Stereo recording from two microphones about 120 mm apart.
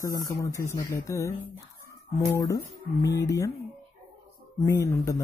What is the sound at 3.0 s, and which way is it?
Speech, 30° left (ahead or behind).